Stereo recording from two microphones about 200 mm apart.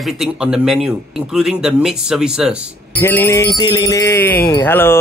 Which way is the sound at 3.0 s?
10° left (ahead or behind).